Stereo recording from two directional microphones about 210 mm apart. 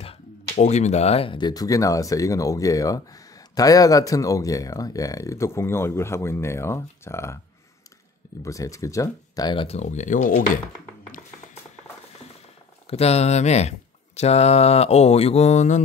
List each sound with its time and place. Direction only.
0.6 s speech: 35° left (ahead or behind); by 7.3 s 10° left (ahead or behind)
8.4 s speech: 15° left (ahead or behind); by 10.6 s 35° left (ahead or behind)
12.9 s speech: 30° left (ahead or behind)